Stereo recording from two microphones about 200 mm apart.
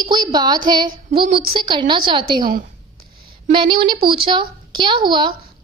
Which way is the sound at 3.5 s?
25° right (ahead or behind).